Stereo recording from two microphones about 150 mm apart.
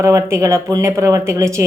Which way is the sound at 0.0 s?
20° right (ahead or behind).